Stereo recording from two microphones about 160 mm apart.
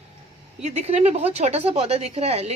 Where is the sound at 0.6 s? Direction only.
40° right (ahead or behind).